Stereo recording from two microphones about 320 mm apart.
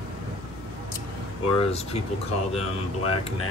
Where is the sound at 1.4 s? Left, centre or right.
Centre.